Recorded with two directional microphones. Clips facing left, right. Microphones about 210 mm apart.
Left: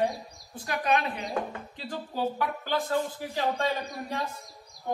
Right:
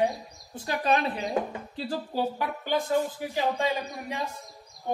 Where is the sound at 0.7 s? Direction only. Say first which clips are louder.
Right 2 dB; 30° right (ahead or behind).